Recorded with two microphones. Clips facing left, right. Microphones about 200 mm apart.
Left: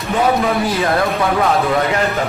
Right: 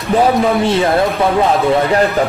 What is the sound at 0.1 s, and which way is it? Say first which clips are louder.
Speech: right 4 dB; 25° right (ahead or behind).